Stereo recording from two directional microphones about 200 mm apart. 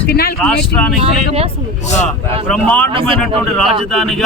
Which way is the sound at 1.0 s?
30° right (ahead or behind).